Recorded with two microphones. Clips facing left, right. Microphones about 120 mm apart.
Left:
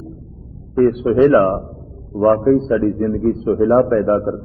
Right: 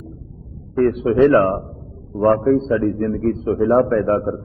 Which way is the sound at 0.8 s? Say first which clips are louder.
Left 2 dB; centre (ahead or behind).